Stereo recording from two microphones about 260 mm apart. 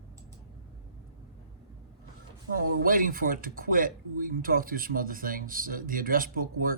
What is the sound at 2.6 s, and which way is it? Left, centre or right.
Speech, right.